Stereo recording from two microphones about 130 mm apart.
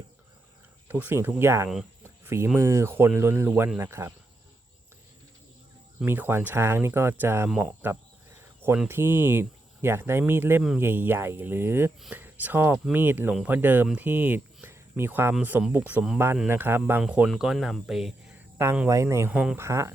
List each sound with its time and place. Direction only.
0.9 s speech: 15° right (ahead or behind)
2.0 s a sound: 20° right (ahead or behind)
2.6 s speech: 20° right (ahead or behind)
6.1 s speech: 15° right (ahead or behind)
8.4 s a sound: 15° right (ahead or behind)
8.9 s speech: 15° right (ahead or behind)
18.5 s speech: 20° right (ahead or behind)
19.3 s speech: 10° right (ahead or behind)
19.5 s speech: 20° right (ahead or behind)